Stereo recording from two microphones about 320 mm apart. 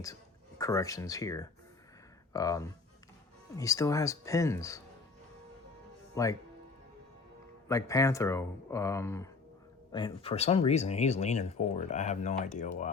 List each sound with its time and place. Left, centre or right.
0.6 s speech: centre
6.2 s speech: centre
7.7 s speech: centre